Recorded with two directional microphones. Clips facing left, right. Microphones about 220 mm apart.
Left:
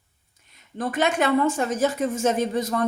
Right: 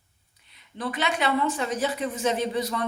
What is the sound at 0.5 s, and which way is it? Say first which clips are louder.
A woman's voice: left 4 dB; 45° left (ahead or behind).